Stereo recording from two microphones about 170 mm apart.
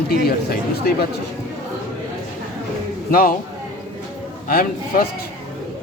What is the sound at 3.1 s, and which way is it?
Speech, 55° left (ahead or behind).